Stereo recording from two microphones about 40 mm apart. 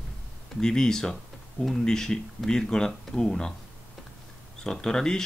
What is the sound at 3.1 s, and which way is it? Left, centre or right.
Speech, centre.